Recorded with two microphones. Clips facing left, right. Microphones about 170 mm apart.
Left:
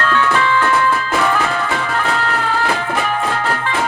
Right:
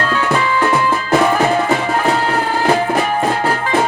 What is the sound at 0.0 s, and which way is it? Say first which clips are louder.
Music: even; 35° right (ahead or behind).